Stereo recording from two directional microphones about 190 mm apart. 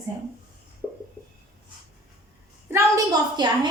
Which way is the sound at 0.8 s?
Centre (ahead or behind).